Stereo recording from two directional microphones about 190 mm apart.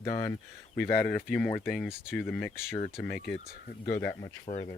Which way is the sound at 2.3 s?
10° left (ahead or behind).